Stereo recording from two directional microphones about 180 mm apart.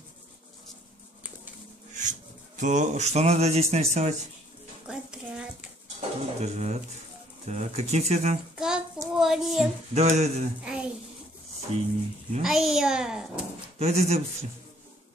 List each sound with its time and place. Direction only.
2.0 s a sound: 45° right (ahead or behind)
3.7 s speech: 35° right (ahead or behind)
4.8 s a sound: 5° right (ahead or behind)
5.9 s a sound: 40° right (ahead or behind)
7.4 s speech: 40° right (ahead or behind)
8.5 s child singing: 5° right (ahead or behind)
9.2 s a child's voice: centre (ahead or behind)
9.9 s speech: 35° right (ahead or behind)
10.6 s a sound: 5° right (ahead or behind)
11.7 s speech: 35° right (ahead or behind)
12.4 s speech: centre (ahead or behind)
13.7 s speech: 35° right (ahead or behind)